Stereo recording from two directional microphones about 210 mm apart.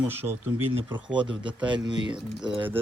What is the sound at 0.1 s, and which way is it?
Speech, 10° right (ahead or behind).